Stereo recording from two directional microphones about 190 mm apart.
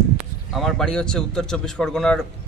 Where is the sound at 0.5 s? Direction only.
Centre (ahead or behind).